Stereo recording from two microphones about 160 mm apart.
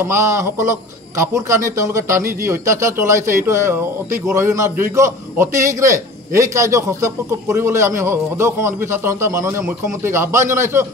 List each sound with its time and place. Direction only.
0.0 s a man's voice: 15° right (ahead or behind)